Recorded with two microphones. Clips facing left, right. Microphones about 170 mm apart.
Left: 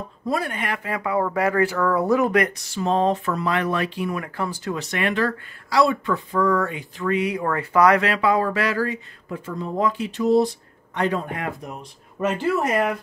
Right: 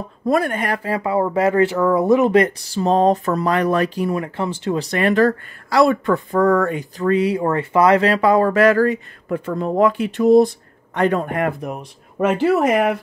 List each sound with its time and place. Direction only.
0.3 s speech: 50° right (ahead or behind); by 4.7 s 25° right (ahead or behind)
4.7 s speech: 35° right (ahead or behind); by 12.9 s 70° right (ahead or behind)